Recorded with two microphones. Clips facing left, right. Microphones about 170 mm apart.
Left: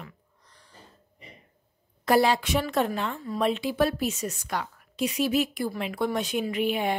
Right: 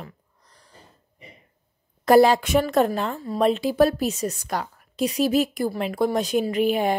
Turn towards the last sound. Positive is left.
turn(degrees=-40)  # may be behind; listen again after turning